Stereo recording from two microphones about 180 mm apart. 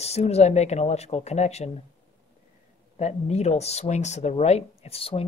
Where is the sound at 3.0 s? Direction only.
35° left (ahead or behind).